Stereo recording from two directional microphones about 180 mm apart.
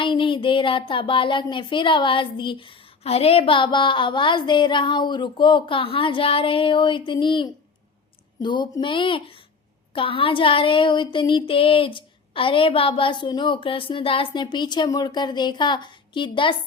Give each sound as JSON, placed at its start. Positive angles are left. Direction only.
{"t": 0.0, "sound": "speech", "side_deg": 25}